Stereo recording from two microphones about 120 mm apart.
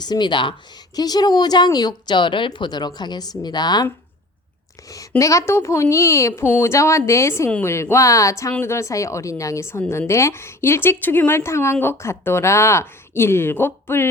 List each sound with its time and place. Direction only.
0.0 s speech: 35° left (ahead or behind)
4.9 s speech: 30° left (ahead or behind)